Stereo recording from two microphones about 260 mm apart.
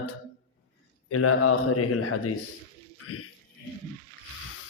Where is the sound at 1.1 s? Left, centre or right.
Left.